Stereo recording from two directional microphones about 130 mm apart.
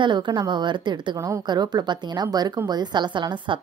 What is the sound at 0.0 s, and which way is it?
A woman's voice, 35° right (ahead or behind).